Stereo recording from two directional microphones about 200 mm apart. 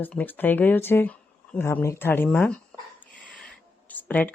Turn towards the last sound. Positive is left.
turn(degrees=10)  # may be behind; listen again after turning